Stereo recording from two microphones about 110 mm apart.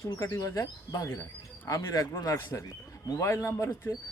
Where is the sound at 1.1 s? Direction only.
20° left (ahead or behind).